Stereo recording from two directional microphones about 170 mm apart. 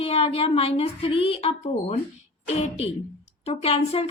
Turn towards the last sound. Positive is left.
turn(degrees=35)  # may be behind; listen again after turning